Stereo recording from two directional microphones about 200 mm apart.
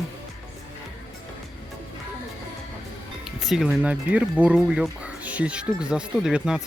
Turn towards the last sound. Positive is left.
turn(degrees=-5)  # may be behind; listen again after turning